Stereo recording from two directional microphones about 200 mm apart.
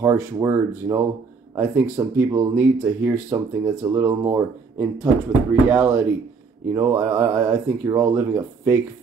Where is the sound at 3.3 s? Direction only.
15° right (ahead or behind).